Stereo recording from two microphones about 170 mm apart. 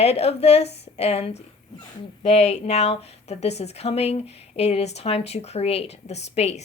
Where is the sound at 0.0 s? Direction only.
40° left (ahead or behind).